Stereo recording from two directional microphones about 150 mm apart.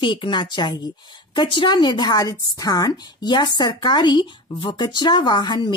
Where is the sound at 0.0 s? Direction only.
35° left (ahead or behind).